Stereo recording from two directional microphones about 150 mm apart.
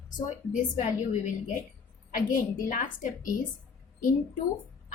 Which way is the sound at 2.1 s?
65° left (ahead or behind).